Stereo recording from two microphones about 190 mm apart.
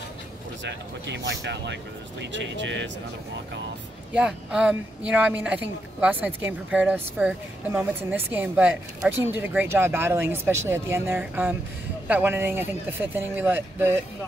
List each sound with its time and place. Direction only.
0.7 s speech: 65° right (ahead or behind)
4.1 s a woman's voice: 5° right (ahead or behind)